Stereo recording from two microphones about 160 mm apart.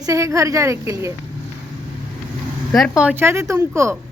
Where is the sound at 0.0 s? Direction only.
20° right (ahead or behind).